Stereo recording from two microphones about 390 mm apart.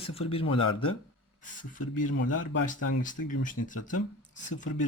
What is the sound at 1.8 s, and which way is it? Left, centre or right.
Speech, left.